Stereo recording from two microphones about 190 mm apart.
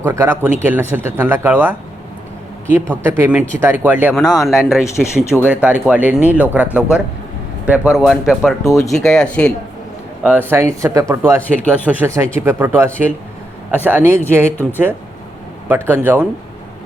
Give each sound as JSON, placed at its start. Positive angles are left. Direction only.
{"t": 0.0, "sound": "speech", "side_deg": -15}
{"t": 2.9, "sound": "speech", "side_deg": -10}
{"t": 4.1, "sound": "speech", "side_deg": 0}
{"t": 8.6, "sound": "speech", "side_deg": 15}
{"t": 8.9, "sound": "speech", "side_deg": 0}
{"t": 10.2, "sound": "speech", "side_deg": -10}
{"t": 15.7, "sound": "speech", "side_deg": -10}